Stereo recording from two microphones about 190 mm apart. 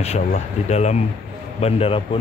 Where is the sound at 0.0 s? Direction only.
35° left (ahead or behind).